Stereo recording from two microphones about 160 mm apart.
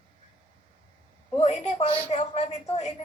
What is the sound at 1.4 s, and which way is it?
A woman's voice, 45° left (ahead or behind).